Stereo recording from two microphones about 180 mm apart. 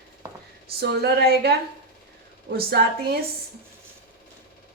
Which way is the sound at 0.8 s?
65° right (ahead or behind).